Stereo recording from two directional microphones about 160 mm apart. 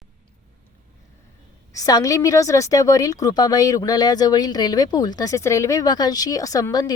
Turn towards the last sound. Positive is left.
turn(degrees=25)  # may be behind; listen again after turning